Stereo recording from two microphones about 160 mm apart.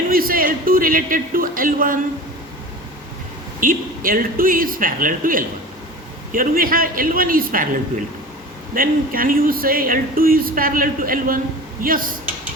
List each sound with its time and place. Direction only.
0.1 s speech: 65° right (ahead or behind)
3.6 s speech: 60° right (ahead or behind)